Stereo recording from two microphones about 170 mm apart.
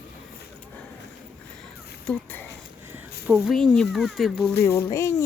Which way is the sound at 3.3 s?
Centre (ahead or behind).